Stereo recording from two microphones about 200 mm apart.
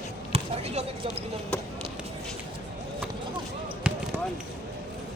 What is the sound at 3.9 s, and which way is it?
Basketball bounce, 5° right (ahead or behind).